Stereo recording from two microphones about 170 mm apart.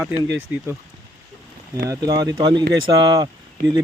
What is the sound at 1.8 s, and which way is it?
Speech, 20° right (ahead or behind).